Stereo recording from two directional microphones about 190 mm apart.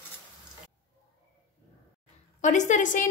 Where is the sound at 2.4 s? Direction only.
40° left (ahead or behind).